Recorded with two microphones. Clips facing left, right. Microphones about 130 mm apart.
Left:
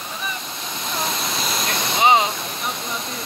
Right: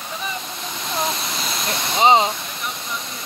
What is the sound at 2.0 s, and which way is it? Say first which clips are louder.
Speech: right 2 dB; 25° right (ahead or behind).